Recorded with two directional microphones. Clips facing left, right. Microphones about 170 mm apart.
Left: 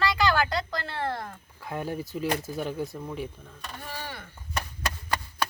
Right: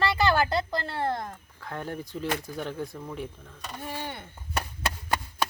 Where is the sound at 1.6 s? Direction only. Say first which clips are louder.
Left 3 dB; 10° left (ahead or behind); by 3.9 s 5° right (ahead or behind).